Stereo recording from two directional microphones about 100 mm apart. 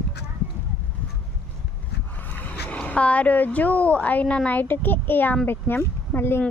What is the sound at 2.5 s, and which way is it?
Speech, 15° left (ahead or behind).